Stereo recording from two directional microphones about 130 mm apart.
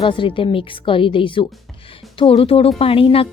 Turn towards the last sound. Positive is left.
turn(degrees=45)  # may be behind; listen again after turning